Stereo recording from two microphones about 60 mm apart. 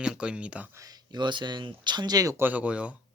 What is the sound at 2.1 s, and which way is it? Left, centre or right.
Speech, right.